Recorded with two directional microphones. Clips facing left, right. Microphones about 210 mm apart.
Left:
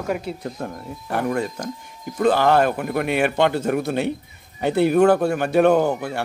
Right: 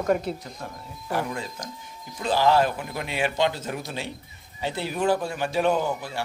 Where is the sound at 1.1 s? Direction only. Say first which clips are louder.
Left 6 dB; 60° left (ahead or behind).